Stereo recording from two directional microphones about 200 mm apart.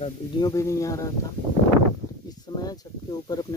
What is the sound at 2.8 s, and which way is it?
Speech, 20° left (ahead or behind).